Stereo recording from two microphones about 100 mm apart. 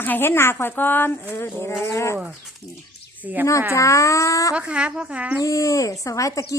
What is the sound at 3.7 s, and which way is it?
Speech, 30° left (ahead or behind).